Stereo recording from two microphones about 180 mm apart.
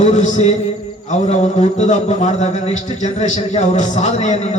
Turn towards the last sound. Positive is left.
turn(degrees=40)  # may be behind; listen again after turning